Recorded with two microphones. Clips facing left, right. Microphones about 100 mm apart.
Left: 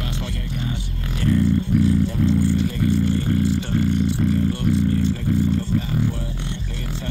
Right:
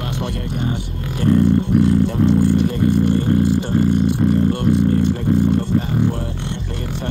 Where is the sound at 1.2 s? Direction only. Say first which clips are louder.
Right 5 dB; 55° right (ahead or behind).